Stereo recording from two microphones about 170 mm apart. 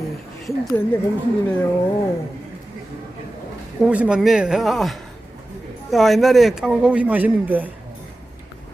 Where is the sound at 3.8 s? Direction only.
5° right (ahead or behind).